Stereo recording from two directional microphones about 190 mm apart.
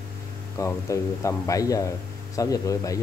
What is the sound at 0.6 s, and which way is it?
Speech, 15° left (ahead or behind).